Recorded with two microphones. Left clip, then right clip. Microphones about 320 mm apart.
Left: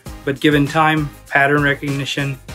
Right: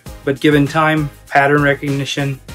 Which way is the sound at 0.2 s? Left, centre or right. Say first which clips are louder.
Right 2 dB; centre.